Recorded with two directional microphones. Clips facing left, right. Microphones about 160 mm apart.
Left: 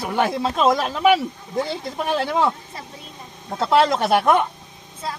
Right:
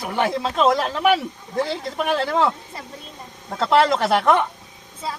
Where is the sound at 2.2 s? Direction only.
10° left (ahead or behind).